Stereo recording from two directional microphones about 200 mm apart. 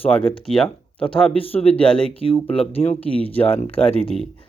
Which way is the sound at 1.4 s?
30° left (ahead or behind).